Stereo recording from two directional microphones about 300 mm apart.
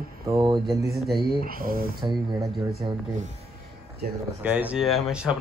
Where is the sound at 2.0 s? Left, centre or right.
Centre.